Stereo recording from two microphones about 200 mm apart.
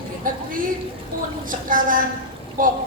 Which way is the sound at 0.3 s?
45° right (ahead or behind).